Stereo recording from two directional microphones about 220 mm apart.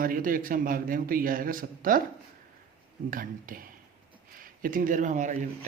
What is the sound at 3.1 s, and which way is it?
Speech, 40° right (ahead or behind).